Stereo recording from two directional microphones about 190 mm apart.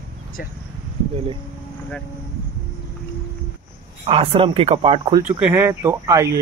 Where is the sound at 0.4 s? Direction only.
50° left (ahead or behind).